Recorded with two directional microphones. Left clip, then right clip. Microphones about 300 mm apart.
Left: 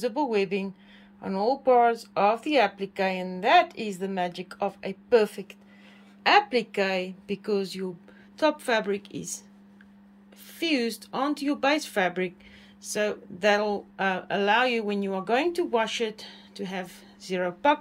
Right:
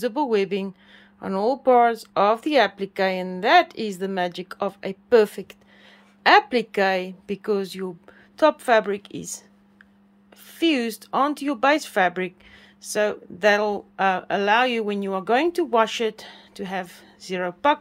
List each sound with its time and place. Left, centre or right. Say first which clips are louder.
0.0 s speech: right 4 dB; centre
10.6 s speech: right 5 dB; centre